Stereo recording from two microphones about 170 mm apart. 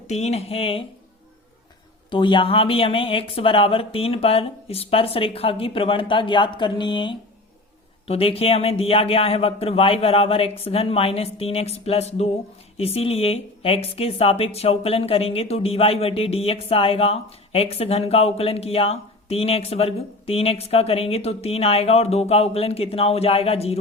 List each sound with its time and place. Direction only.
0.1 s speech: 40° left (ahead or behind)
2.0 s speech: 30° left (ahead or behind)